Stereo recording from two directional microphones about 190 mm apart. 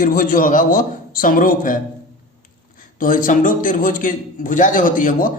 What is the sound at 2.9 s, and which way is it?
A man's voice, 45° left (ahead or behind).